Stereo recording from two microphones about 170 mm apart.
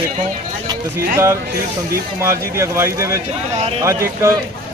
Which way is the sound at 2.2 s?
15° right (ahead or behind).